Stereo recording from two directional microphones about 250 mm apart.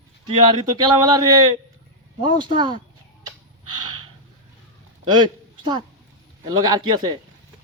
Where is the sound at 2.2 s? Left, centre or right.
Centre.